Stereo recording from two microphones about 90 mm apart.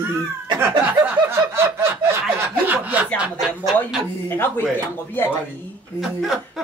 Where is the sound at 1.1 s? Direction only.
25° right (ahead or behind).